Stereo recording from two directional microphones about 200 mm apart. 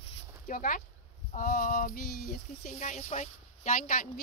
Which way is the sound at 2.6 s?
40° left (ahead or behind).